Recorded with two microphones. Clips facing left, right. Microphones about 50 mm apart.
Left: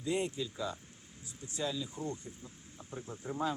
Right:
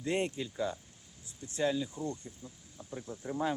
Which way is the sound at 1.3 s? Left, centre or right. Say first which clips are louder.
Right 1 dB; left.